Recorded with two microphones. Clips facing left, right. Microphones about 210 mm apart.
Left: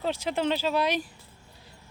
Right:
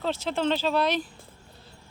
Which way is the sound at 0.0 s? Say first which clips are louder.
Right 1 dB; 10° left (ahead or behind).